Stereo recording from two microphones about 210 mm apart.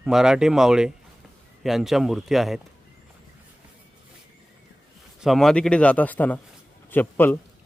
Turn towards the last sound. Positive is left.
turn(degrees=10)  # may be behind; listen again after turning